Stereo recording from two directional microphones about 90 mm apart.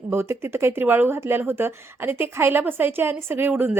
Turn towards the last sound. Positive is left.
turn(degrees=-20)  # may be behind; listen again after turning